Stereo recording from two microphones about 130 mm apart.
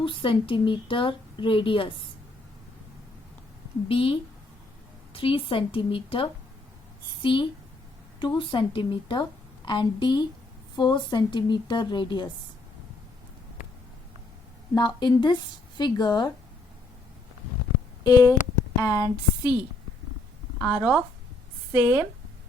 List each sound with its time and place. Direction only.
0.0 s speech: 40° left (ahead or behind)
3.8 s a woman's voice: 45° left (ahead or behind)
14.8 s speech: 35° left (ahead or behind)
18.0 s speech: 30° left (ahead or behind)
20.6 s speech: 10° right (ahead or behind)